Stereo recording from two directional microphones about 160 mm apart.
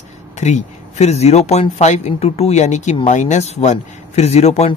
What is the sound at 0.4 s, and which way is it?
Speech, 45° left (ahead or behind).